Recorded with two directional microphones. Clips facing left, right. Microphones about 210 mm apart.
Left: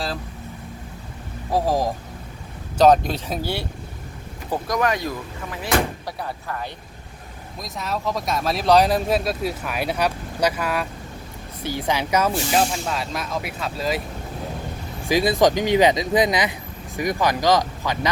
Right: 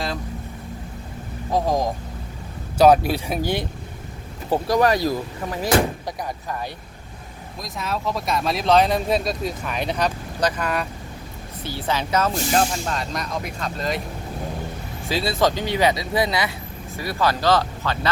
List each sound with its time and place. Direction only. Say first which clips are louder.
1.5 s speech: even; 5° left (ahead or behind)
2.7 s speech: right 1 dB; 10° right (ahead or behind)
4.4 s speech: right 4 dB; 30° right (ahead or behind)
6.1 s speech: right 1 dB; 15° right (ahead or behind)
7.6 s speech: even; centre (ahead or behind)
15.0 s speech: left 4 dB; 15° left (ahead or behind)